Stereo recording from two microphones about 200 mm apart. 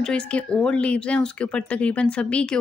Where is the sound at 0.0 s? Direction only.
5° left (ahead or behind).